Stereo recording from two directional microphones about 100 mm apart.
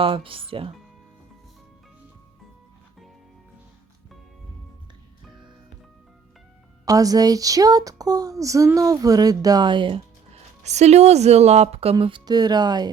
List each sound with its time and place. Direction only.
0.0 s speech: 60° right (ahead or behind)
6.8 s speech: 35° right (ahead or behind); by 10.0 s 55° right (ahead or behind)
10.3 s speech: 90° right
11.9 s speech: 55° right (ahead or behind)